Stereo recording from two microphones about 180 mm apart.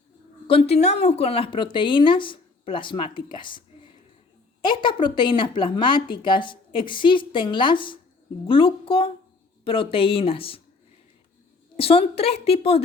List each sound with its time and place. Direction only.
0.4 s speech: 35° left (ahead or behind)
4.6 s a woman's voice: 25° left (ahead or behind)
11.8 s a woman's voice: 35° left (ahead or behind)